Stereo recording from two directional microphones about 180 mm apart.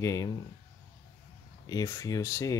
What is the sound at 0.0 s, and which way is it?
Speech, 20° left (ahead or behind).